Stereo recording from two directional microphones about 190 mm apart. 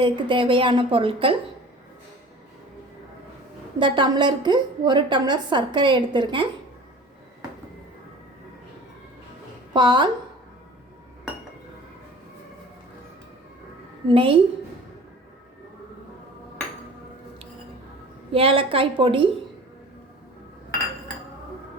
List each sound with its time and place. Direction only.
0.0 s a woman's voice: 25° right (ahead or behind)
3.8 s a woman's voice: 25° right (ahead or behind)
9.7 s a woman's voice: 25° right (ahead or behind)
14.1 s a woman's voice: 30° right (ahead or behind)
18.3 s a woman's voice: 30° right (ahead or behind)